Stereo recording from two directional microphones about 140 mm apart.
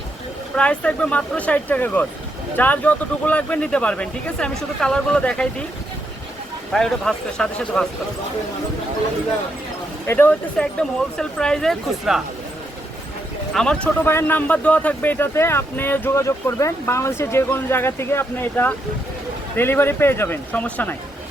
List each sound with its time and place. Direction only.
0.5 s a man's voice: 10° left (ahead or behind)
6.7 s speech: 5° left (ahead or behind)
10.1 s speech: 15° left (ahead or behind)
13.5 s a man's voice: 5° left (ahead or behind)